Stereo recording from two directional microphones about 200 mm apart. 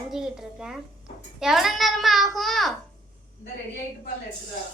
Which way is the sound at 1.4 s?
Centre (ahead or behind).